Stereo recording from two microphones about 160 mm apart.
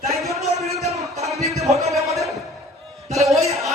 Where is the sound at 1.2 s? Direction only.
Centre (ahead or behind).